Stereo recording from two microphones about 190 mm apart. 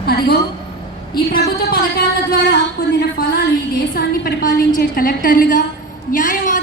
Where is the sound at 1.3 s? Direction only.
50° left (ahead or behind).